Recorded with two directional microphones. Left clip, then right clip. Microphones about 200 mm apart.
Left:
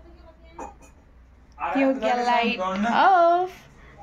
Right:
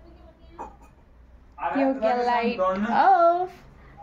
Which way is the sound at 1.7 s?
Centre (ahead or behind).